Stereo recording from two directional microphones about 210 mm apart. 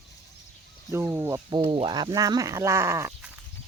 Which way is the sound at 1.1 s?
10° right (ahead or behind).